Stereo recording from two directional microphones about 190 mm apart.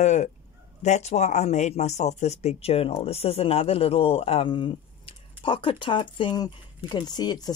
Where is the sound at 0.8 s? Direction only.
35° left (ahead or behind).